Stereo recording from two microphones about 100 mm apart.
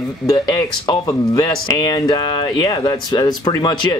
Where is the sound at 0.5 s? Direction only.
45° left (ahead or behind).